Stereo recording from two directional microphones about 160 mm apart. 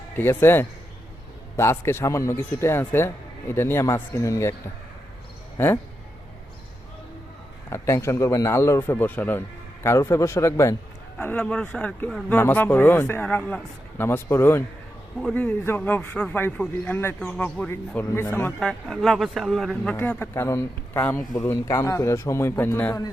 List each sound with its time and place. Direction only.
0.2 s a man's voice: 15° left (ahead or behind)
5.5 s a man's voice: 15° left (ahead or behind)
7.7 s a man's voice: 15° left (ahead or behind)
18.7 s a man's voice: centre (ahead or behind)